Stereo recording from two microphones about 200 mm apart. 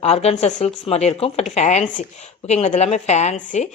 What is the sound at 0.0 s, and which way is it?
Speech, 30° left (ahead or behind).